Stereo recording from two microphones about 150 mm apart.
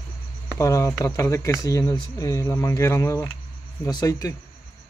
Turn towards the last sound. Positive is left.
turn(degrees=25)  # may be behind; listen again after turning